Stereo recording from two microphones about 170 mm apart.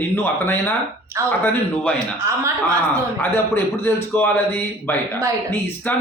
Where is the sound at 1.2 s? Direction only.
15° right (ahead or behind).